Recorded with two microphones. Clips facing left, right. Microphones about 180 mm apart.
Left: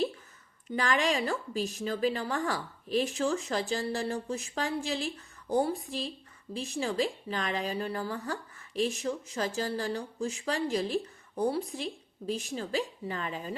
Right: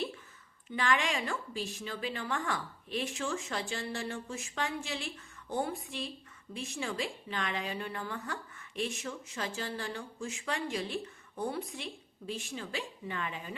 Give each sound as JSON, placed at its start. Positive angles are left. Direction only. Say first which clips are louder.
{"t": 0.7, "sound": "speech", "louder": "left 3 dB", "side_deg": 40}